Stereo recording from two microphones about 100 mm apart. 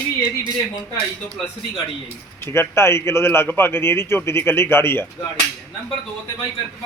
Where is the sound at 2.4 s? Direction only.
25° left (ahead or behind).